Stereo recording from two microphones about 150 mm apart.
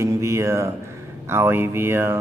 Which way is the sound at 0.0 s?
20° right (ahead or behind).